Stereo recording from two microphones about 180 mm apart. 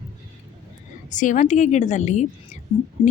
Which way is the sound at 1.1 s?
45° left (ahead or behind).